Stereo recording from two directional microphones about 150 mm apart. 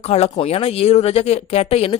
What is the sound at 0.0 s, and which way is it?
Speech, 45° left (ahead or behind).